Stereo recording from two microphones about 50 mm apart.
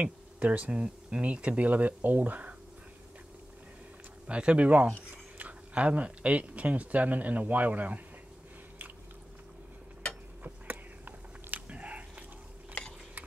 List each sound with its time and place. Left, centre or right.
0.0 s speech: right
4.3 s speech: right
4.6 s speech: right
5.1 s a sound: right
5.9 s speech: right
10.4 s a sound: right
11.7 s biting: right